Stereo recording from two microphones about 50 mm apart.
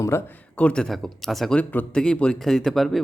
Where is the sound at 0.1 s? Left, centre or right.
Left.